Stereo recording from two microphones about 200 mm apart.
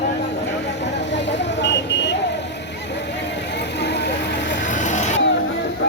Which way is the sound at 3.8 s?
60° left (ahead or behind).